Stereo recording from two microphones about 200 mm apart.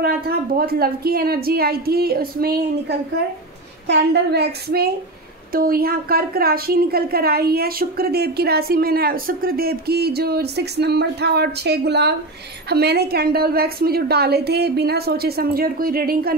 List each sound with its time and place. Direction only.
0.6 s a woman's voice: 50° right (ahead or behind)